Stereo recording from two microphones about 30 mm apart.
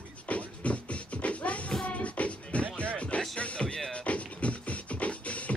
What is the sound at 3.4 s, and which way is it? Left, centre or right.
Music, left.